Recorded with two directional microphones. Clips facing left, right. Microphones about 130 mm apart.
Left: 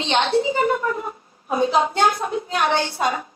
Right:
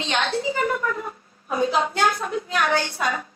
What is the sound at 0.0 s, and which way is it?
A woman's voice, 25° left (ahead or behind).